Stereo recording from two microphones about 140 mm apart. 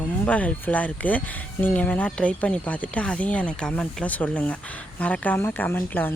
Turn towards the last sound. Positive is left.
turn(degrees=15)  # may be behind; listen again after turning